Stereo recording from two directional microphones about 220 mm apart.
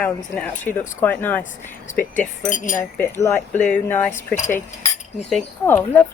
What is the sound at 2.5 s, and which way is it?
Speech, 35° left (ahead or behind).